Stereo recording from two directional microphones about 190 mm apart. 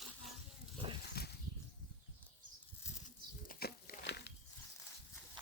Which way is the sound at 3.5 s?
50° left (ahead or behind).